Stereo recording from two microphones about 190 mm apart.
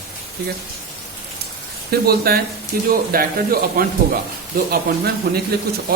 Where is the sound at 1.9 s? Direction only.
55° right (ahead or behind).